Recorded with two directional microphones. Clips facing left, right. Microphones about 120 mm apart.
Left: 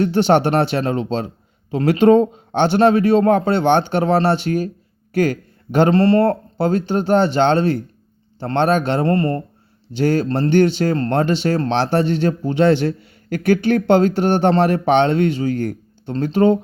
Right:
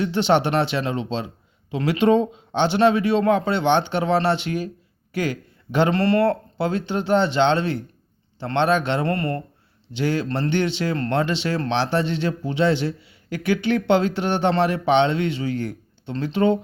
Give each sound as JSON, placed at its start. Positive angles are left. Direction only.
{"t": 0.0, "sound": "speech", "side_deg": 45}
{"t": 9.9, "sound": "speech", "side_deg": 45}